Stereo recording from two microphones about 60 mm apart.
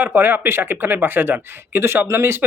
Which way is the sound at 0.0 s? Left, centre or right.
Right.